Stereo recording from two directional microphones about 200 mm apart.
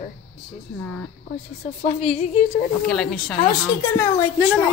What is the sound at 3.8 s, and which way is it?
Speech, 15° left (ahead or behind).